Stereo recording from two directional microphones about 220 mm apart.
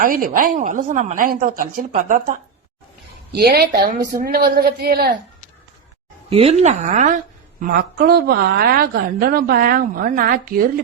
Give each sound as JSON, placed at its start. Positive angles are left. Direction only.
{"t": 0.0, "sound": "speech", "side_deg": -40}
{"t": 3.3, "sound": "a woman's voice", "side_deg": -45}
{"t": 6.3, "sound": "a woman's voice", "side_deg": -30}